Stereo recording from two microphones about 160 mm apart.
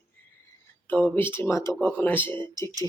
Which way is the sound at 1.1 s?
15° left (ahead or behind).